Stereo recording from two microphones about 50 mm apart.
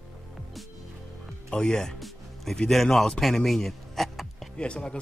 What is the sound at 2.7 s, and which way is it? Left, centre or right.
Speech, centre.